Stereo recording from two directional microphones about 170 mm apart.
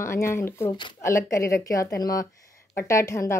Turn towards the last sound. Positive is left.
turn(degrees=15)  # may be behind; listen again after turning